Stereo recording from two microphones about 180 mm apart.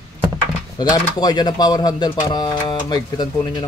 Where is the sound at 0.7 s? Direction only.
20° left (ahead or behind).